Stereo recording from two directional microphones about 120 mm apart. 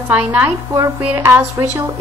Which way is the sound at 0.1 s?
15° right (ahead or behind).